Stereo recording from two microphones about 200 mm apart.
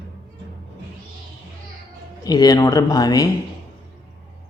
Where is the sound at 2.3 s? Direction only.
20° left (ahead or behind).